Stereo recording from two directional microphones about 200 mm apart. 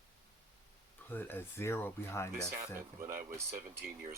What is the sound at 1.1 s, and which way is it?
Speech, 10° left (ahead or behind).